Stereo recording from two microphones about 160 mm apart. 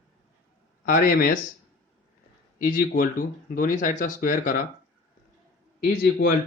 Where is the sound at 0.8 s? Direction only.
60° left (ahead or behind).